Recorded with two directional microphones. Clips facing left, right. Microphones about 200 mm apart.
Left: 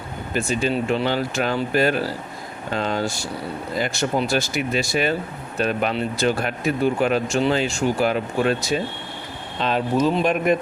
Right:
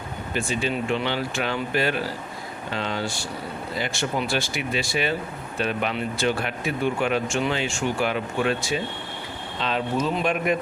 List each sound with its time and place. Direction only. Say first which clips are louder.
0.3 s speech: left 4 dB; 40° left (ahead or behind)